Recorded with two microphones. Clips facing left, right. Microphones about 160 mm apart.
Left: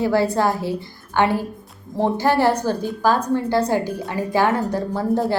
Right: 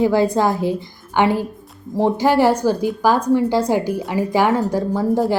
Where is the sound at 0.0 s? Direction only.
15° right (ahead or behind).